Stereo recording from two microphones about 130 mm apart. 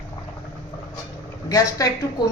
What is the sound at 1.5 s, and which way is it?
Speech, 25° left (ahead or behind).